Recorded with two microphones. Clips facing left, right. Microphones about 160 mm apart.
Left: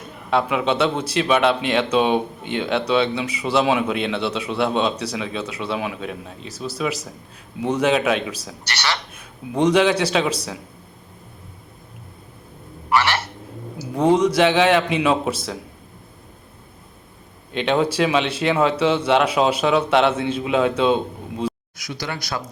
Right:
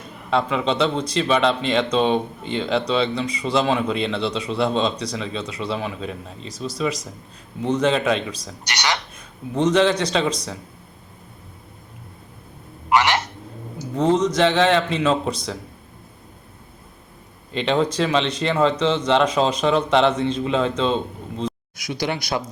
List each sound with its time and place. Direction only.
0.3 s a man's voice: 5° left (ahead or behind)
8.6 s speech: 15° right (ahead or behind)
9.1 s a man's voice: 10° left (ahead or behind)
12.9 s a sound: 20° right (ahead or behind)
13.9 s a man's voice: 10° left (ahead or behind)
17.5 s a man's voice: 5° left (ahead or behind)
21.8 s speech: 15° right (ahead or behind)